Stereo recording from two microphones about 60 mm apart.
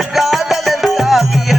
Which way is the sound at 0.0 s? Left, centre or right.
Centre.